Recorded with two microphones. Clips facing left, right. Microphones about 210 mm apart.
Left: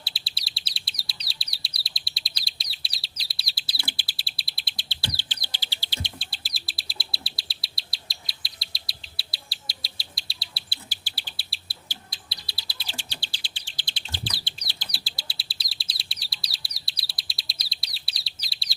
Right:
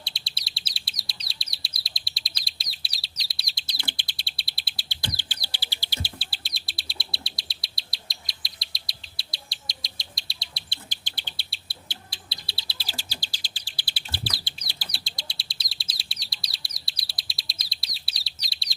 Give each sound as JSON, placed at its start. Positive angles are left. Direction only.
{"t": 0.0, "sound": "chirp", "side_deg": 5}
{"t": 4.9, "sound": "bird", "side_deg": -15}
{"t": 5.5, "sound": "insect", "side_deg": -15}
{"t": 11.9, "sound": "bird", "side_deg": -25}
{"t": 13.0, "sound": "bird", "side_deg": -40}
{"t": 13.7, "sound": "bird", "side_deg": -10}
{"t": 14.8, "sound": "bird", "side_deg": 5}